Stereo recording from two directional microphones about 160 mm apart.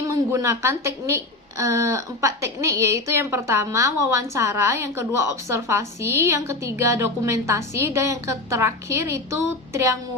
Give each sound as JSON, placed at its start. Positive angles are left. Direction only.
{"t": 0.0, "sound": "a woman's voice", "side_deg": -20}